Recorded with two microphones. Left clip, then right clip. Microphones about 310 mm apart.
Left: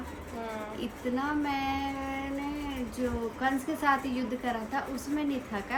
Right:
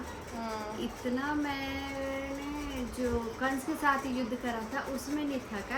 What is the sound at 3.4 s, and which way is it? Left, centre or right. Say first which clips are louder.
Speech: left 4 dB; centre.